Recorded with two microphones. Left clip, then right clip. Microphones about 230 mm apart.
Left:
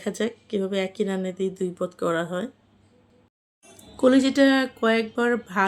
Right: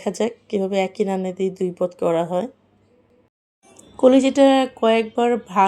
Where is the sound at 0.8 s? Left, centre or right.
Left.